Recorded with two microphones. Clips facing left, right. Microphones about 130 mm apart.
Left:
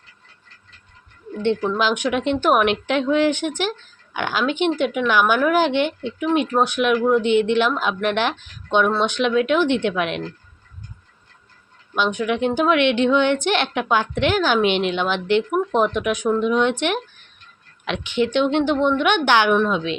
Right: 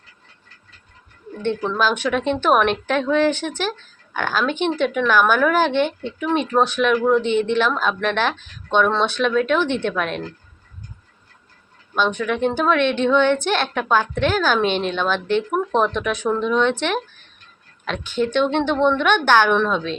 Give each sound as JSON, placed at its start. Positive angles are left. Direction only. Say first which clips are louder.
{"t": 1.7, "sound": "a woman's voice", "louder": "even", "side_deg": 15}
{"t": 11.9, "sound": "a woman's voice", "louder": "even", "side_deg": 15}
{"t": 18.4, "sound": "a woman's voice", "louder": "even", "side_deg": 15}